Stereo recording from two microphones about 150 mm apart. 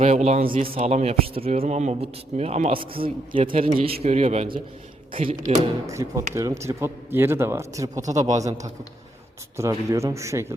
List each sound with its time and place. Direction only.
0.0 s speech: 45° right (ahead or behind)
5.8 s speech: 20° right (ahead or behind)